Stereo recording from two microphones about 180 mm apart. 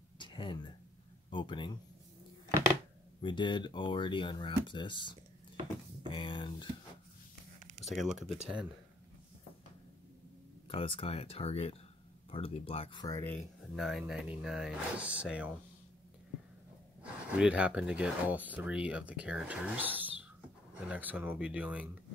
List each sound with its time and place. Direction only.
0.2 s a sound: 25° left (ahead or behind)
1.3 s speech: 25° left (ahead or behind)
3.2 s speech: 25° left (ahead or behind)
7.8 s speech: centre (ahead or behind)
10.7 s speech: 30° left (ahead or behind)
13.7 s speech: centre (ahead or behind)
17.0 s speech: 5° right (ahead or behind)